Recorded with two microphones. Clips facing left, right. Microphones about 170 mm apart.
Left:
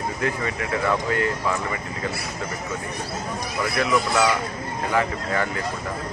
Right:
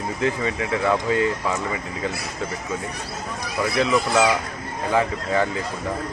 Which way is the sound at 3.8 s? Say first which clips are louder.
Right 2 dB; 15° right (ahead or behind).